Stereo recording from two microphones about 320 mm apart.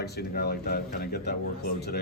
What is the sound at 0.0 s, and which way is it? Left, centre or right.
Speech, left.